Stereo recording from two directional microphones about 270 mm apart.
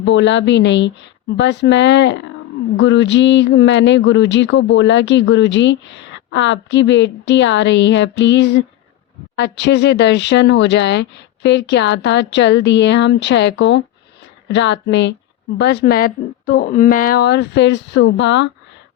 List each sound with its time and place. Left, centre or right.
0.0 s a woman's voice: left